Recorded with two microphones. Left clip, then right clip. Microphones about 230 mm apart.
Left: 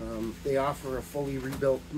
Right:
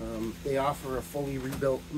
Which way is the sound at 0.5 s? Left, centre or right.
Centre.